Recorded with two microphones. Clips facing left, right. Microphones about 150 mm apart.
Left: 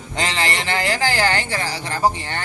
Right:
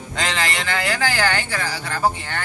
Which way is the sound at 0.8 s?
25° left (ahead or behind).